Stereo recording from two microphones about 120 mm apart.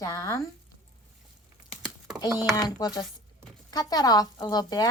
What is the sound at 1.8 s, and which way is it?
Typing, 30° right (ahead or behind).